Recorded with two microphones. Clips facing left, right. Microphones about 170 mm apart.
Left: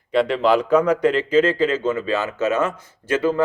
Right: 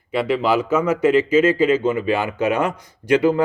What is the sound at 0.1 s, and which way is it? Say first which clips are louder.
A man's voice: left 1 dB; 5° right (ahead or behind).